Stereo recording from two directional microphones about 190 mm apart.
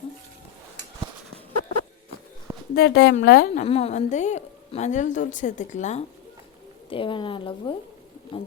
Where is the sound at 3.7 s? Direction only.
30° left (ahead or behind).